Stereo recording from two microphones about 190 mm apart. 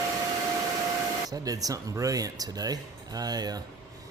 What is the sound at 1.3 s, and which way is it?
Speech, 20° right (ahead or behind).